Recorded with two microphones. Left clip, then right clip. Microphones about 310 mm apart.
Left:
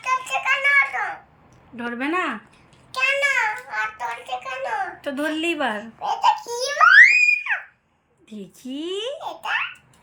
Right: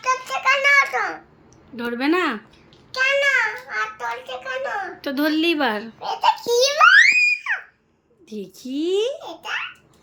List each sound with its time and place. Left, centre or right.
0.0 s child singing: centre
1.8 s a child's voice: centre
2.9 s a sound: centre
6.3 s baby laughter: centre
7.3 s a sound: centre
8.6 s a child's voice: centre